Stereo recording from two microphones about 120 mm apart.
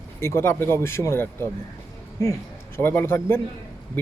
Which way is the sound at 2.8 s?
15° left (ahead or behind).